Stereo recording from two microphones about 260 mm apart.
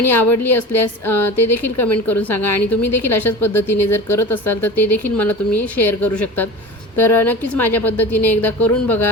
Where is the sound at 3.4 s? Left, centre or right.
Centre.